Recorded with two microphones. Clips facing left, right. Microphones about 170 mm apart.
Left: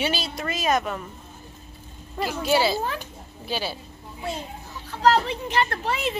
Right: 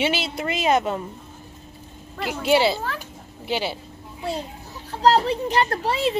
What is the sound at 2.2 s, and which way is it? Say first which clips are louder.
A child's voice: right 3 dB; 20° right (ahead or behind).